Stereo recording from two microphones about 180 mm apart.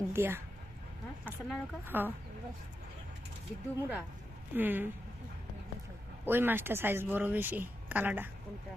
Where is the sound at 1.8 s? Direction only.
10° right (ahead or behind).